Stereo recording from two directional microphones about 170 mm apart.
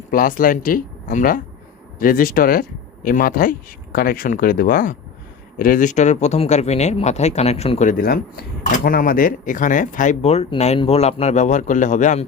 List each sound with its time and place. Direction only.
0.1 s speech: 55° left (ahead or behind)